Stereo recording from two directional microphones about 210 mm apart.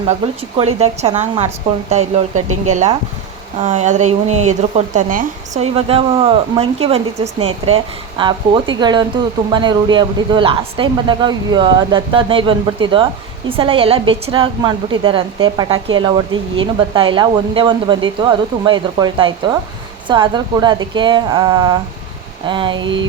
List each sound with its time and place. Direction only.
0.0 s a woman's voice: 30° right (ahead or behind)